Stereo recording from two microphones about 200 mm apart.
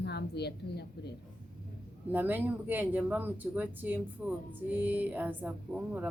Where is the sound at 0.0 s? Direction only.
55° left (ahead or behind).